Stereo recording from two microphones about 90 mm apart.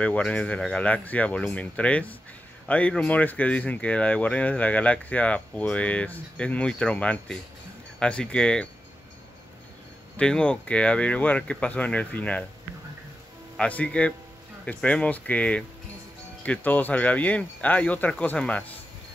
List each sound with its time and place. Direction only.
0.0 s speech: 15° left (ahead or behind)
10.1 s speech: 10° left (ahead or behind)
13.6 s speech: 15° left (ahead or behind)